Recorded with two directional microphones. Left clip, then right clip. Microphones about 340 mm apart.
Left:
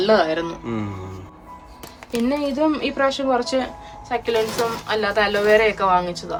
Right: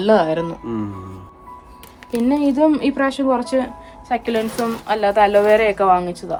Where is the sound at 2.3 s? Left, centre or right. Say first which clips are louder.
Right 5 dB; right.